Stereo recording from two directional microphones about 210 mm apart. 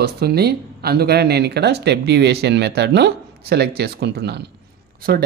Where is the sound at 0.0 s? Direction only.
50° right (ahead or behind).